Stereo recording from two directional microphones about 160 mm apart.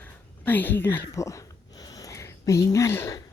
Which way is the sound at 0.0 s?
10° left (ahead or behind).